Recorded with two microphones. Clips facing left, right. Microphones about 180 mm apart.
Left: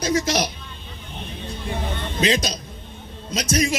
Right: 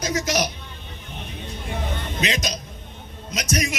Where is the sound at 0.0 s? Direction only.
30° left (ahead or behind).